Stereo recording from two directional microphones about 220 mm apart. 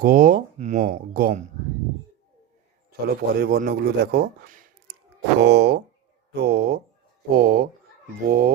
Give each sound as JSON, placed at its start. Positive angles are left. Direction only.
{"t": 0.0, "sound": "speech", "side_deg": -40}
{"t": 3.2, "sound": "speech", "side_deg": -45}
{"t": 5.4, "sound": "speech", "side_deg": -50}